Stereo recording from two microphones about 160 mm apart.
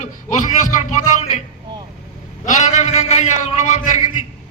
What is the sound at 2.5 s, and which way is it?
A man's voice, 50° left (ahead or behind).